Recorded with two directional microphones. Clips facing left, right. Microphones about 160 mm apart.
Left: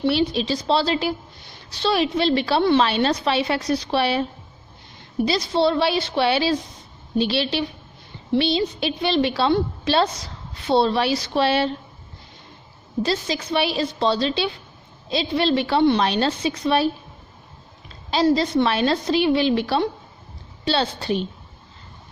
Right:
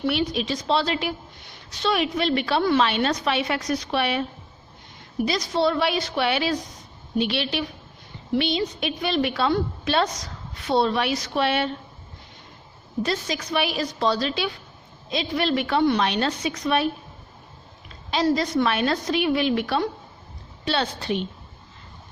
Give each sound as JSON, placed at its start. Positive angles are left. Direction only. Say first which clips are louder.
{"t": 0.0, "sound": "a woman's voice", "louder": "left 4 dB", "side_deg": 30}
{"t": 13.1, "sound": "a woman's voice", "louder": "left 3 dB", "side_deg": 30}
{"t": 18.1, "sound": "a woman's voice", "louder": "left 3 dB", "side_deg": 30}